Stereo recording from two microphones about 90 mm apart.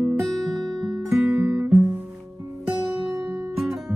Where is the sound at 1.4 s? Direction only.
15° right (ahead or behind).